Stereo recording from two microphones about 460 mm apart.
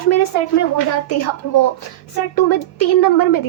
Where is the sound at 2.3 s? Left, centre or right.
Left.